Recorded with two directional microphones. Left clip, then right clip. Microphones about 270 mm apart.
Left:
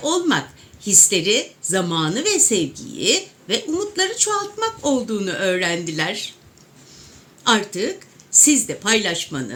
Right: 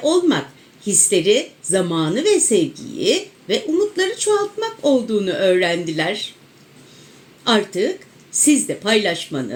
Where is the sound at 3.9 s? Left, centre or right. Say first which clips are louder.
Right 2 dB; left.